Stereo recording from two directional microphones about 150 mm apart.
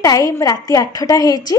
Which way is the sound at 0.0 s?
25° left (ahead or behind).